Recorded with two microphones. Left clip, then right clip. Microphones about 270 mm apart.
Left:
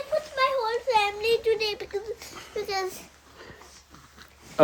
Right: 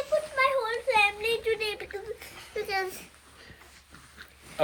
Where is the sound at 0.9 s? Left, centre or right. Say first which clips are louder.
Left 1 dB; left.